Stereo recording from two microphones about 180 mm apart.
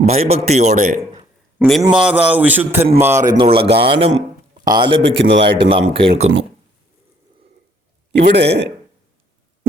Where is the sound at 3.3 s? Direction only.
30° right (ahead or behind).